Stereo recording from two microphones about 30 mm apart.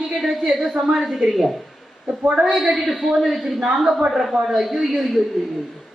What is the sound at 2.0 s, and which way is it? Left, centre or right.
Speech, right.